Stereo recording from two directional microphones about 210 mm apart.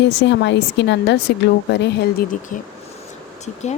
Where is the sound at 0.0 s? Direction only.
55° left (ahead or behind).